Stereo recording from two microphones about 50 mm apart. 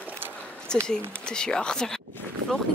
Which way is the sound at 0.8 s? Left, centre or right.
Centre.